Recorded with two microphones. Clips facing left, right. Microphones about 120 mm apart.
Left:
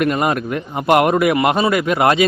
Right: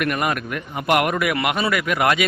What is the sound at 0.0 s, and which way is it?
Speech, 25° left (ahead or behind).